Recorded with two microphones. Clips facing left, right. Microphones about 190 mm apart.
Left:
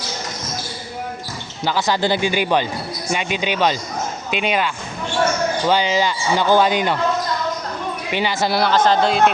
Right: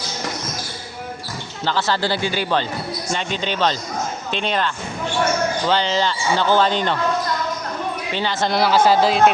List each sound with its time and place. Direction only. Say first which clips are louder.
1.6 s speech: left 2 dB; 15° left (ahead or behind)
8.1 s speech: left 2 dB; 10° left (ahead or behind)
8.7 s speech: right 2 dB; 10° right (ahead or behind)